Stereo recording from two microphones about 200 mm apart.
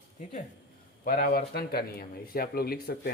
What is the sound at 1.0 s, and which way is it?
Speech, 50° left (ahead or behind).